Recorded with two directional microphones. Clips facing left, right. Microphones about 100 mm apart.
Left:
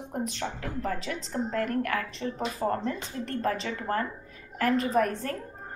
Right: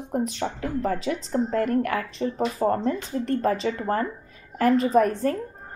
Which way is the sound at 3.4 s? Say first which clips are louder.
Right 2 dB; 20° right (ahead or behind).